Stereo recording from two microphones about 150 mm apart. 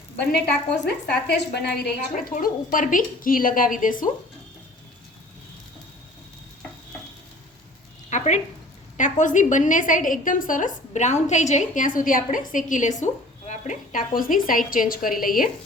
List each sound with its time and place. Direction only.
0.9 s speech: 90° left; by 3.9 s 65° left (ahead or behind)
8.1 s a sound: 50° left (ahead or behind)
9.0 s a woman's voice: 55° left (ahead or behind)